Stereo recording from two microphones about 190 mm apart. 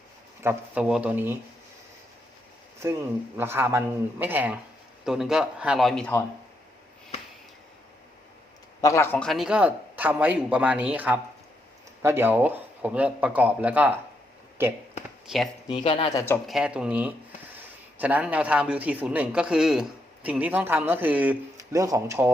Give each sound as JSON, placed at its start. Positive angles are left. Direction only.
{"t": 0.4, "sound": "speech", "side_deg": -5}
{"t": 3.3, "sound": "a man's voice", "side_deg": -10}
{"t": 8.8, "sound": "a man's voice", "side_deg": 15}
{"t": 9.1, "sound": "speech", "side_deg": 0}
{"t": 15.3, "sound": "speech", "side_deg": 0}
{"t": 15.7, "sound": "speech", "side_deg": 30}
{"t": 16.1, "sound": "speech", "side_deg": 10}
{"t": 16.5, "sound": "a man's voice", "side_deg": -5}